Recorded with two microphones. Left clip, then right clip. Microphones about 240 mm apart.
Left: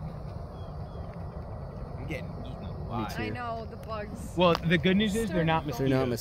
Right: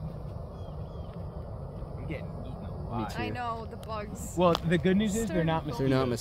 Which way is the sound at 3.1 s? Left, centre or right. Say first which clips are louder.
Even; right.